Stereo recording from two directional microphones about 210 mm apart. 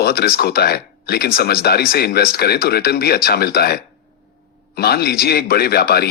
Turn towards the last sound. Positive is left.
turn(degrees=45)  # may be behind; listen again after turning